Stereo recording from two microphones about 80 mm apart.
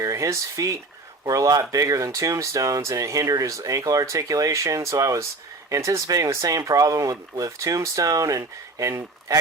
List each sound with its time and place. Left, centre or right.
0.0 s speech: right